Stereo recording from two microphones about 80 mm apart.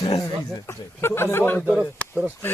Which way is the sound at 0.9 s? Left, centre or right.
Left.